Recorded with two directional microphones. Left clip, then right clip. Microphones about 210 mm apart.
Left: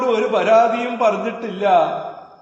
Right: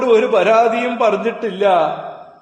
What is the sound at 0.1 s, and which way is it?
A man's voice, 60° right (ahead or behind).